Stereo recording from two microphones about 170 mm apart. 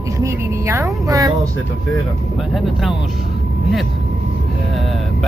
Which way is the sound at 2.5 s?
Centre (ahead or behind).